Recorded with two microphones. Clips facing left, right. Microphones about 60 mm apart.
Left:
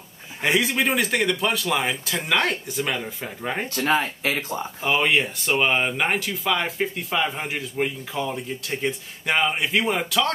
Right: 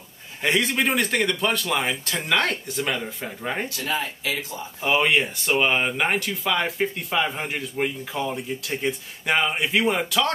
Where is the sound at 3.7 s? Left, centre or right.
Left.